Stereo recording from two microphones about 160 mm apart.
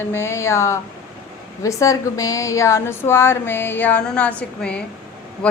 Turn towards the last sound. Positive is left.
turn(degrees=5)  # may be behind; listen again after turning